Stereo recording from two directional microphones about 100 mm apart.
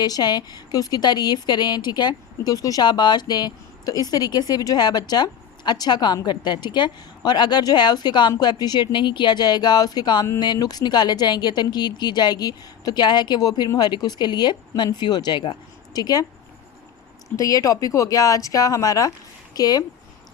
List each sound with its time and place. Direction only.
0.0 s speech: 45° left (ahead or behind)
2.8 s speech: 50° left (ahead or behind)
17.2 s speech: 35° left (ahead or behind)